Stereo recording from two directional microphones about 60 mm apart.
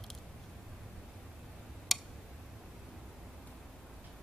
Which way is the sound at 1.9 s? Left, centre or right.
Centre.